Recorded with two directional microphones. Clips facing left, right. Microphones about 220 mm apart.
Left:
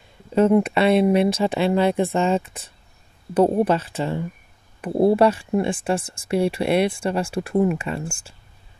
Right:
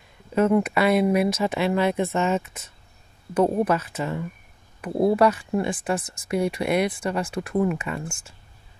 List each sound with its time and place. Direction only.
0.3 s speech: 30° left (ahead or behind)